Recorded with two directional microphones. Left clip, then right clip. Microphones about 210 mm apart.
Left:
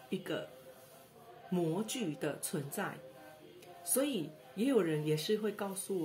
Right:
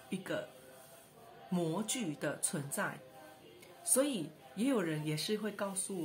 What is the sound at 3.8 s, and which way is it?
A woman's voice, 15° right (ahead or behind).